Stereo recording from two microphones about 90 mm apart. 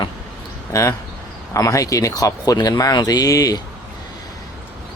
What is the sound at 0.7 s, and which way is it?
Speech, 35° left (ahead or behind).